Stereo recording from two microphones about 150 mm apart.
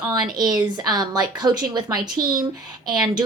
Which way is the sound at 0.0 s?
25° right (ahead or behind).